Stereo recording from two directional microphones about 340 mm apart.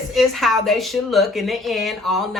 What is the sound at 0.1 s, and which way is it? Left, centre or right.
Speech, centre.